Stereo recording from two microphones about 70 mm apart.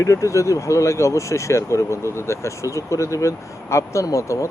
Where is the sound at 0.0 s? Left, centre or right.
Left.